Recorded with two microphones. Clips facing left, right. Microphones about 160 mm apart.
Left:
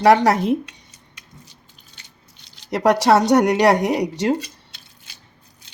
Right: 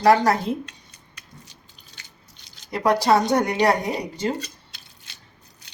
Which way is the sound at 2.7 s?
80° left.